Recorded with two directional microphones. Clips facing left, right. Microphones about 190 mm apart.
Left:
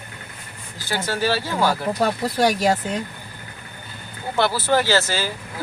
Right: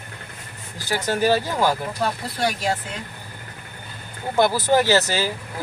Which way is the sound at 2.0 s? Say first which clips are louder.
Left 6 dB; 40° left (ahead or behind).